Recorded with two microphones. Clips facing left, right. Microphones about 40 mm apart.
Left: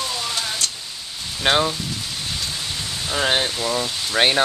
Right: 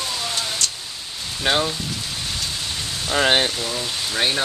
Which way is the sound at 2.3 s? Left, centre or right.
Left.